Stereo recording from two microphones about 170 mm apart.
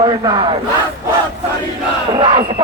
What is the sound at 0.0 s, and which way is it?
Speech, 30° right (ahead or behind).